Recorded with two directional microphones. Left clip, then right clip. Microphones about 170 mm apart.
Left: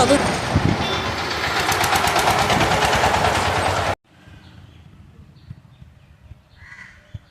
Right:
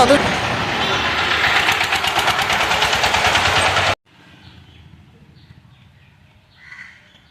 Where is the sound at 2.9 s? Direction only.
20° left (ahead or behind).